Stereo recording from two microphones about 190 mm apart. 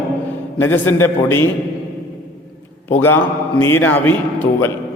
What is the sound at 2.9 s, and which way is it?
A man's voice, 10° left (ahead or behind).